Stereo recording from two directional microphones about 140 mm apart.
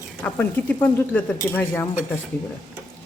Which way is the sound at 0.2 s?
15° left (ahead or behind).